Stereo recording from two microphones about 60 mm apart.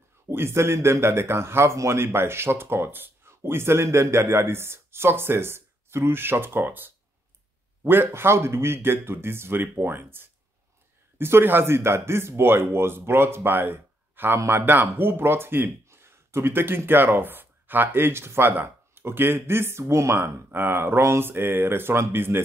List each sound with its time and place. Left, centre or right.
0.3 s speech: right
19.8 s speech: right